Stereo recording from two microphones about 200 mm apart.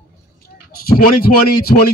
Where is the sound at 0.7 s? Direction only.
45° left (ahead or behind).